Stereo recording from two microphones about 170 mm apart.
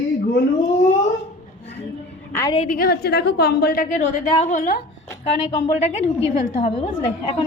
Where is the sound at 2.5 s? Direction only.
50° left (ahead or behind).